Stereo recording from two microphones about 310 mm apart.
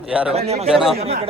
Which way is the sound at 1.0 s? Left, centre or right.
Centre.